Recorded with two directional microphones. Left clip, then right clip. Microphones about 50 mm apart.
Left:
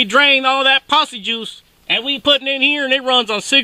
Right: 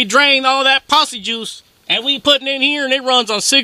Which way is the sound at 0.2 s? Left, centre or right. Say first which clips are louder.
Right 1 dB; right.